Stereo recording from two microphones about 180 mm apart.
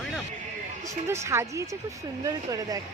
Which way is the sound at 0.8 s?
15° right (ahead or behind).